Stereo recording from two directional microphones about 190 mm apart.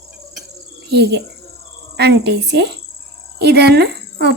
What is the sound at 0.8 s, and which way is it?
Speech, 60° right (ahead or behind).